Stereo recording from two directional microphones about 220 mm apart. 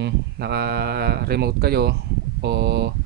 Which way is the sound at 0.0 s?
50° right (ahead or behind).